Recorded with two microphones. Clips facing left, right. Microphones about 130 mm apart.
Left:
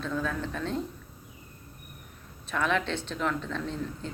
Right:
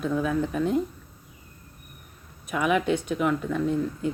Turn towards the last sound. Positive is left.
turn(degrees=-10)  # may be behind; listen again after turning